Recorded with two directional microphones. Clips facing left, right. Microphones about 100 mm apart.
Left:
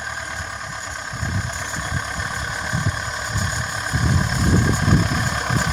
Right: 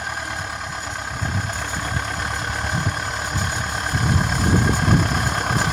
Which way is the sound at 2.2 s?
55° right (ahead or behind).